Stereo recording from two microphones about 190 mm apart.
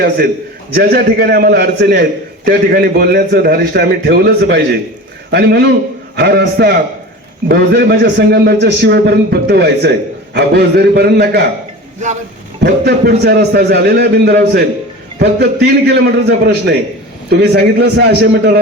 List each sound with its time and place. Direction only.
0.7 s a man's voice: 55° right (ahead or behind)
12.5 s a man's voice: 60° right (ahead or behind)